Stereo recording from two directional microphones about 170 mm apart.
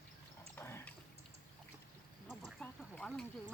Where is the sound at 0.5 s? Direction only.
15° left (ahead or behind).